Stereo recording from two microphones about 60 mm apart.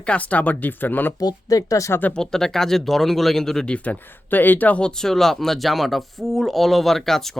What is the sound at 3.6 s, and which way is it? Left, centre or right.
Speech, left.